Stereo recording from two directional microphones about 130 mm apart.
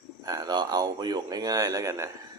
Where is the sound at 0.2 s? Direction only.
30° right (ahead or behind).